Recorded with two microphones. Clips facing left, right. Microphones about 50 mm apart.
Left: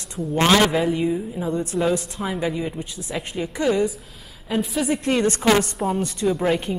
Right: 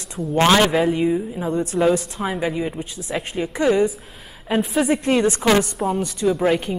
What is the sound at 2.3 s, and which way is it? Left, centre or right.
A woman's voice, centre.